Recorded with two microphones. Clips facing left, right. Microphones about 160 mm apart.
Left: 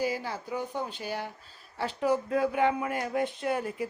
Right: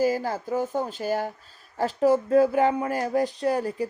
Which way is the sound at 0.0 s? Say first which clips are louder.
Right 7 dB; 45° right (ahead or behind).